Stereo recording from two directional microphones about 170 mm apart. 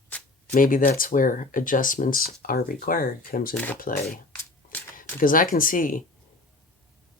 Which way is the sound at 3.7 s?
55° left (ahead or behind).